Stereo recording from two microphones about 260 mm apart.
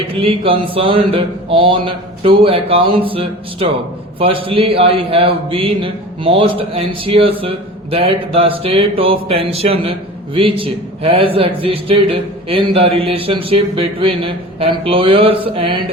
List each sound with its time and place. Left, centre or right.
0.2 s a man's voice: right